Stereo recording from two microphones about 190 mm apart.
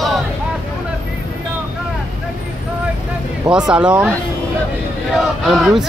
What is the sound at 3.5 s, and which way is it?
Speech, 5° right (ahead or behind).